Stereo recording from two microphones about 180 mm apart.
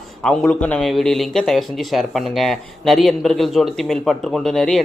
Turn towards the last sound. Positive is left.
turn(degrees=0)  # may be behind; listen again after turning